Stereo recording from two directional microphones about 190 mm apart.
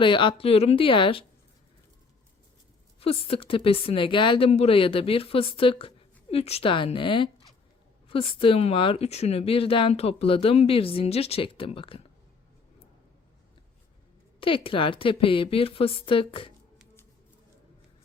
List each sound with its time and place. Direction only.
0.0 s speech: 25° left (ahead or behind)
3.0 s speech: 30° left (ahead or behind)
14.4 s speech: 30° left (ahead or behind)